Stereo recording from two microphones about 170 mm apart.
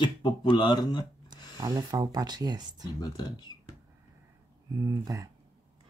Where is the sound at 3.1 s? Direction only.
25° left (ahead or behind).